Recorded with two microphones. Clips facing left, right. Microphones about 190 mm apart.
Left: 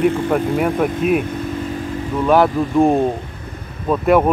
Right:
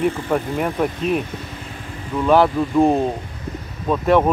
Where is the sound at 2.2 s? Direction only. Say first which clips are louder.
Left 1 dB; centre (ahead or behind).